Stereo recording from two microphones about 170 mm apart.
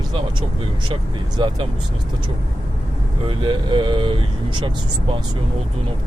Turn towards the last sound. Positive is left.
turn(degrees=-30)  # may be behind; listen again after turning